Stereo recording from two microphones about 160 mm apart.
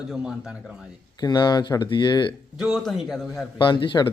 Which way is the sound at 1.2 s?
25° left (ahead or behind).